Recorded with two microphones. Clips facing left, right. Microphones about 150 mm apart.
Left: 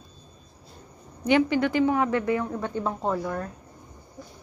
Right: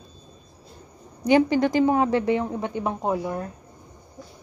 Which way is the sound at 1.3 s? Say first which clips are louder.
Right 3 dB; 35° right (ahead or behind).